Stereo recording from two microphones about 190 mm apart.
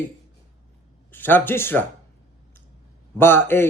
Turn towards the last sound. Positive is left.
turn(degrees=10)  # may be behind; listen again after turning